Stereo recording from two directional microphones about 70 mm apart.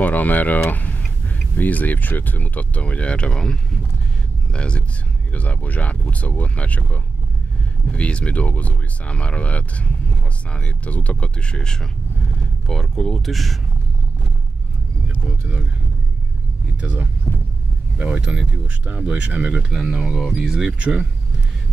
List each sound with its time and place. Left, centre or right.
0.0 s speech: left; by 13.6 s centre
15.2 s speech: centre
16.8 s speech: centre
19.8 s speech: centre